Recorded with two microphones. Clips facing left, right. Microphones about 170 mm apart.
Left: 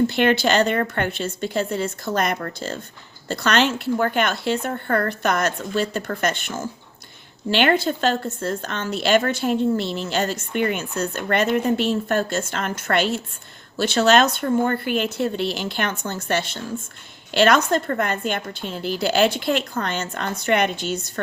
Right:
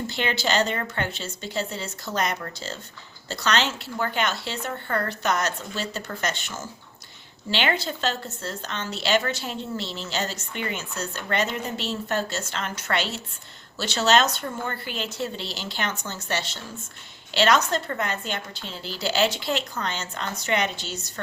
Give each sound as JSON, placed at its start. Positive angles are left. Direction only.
{"t": 0.1, "sound": "a woman's voice", "side_deg": 60}